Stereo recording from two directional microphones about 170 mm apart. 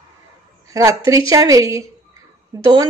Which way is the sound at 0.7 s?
20° right (ahead or behind).